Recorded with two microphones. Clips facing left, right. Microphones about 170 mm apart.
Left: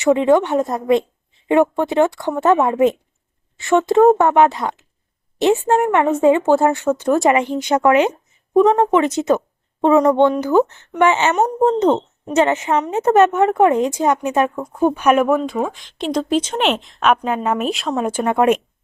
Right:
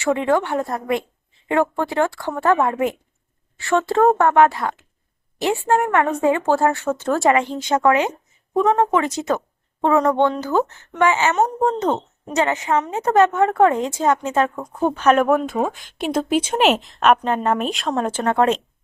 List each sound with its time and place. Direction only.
0.0 s speech: 20° left (ahead or behind)
16.0 s speech: 10° right (ahead or behind); by 18.6 s 15° left (ahead or behind)